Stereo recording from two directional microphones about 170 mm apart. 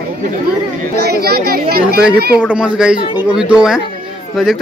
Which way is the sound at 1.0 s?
65° right (ahead or behind).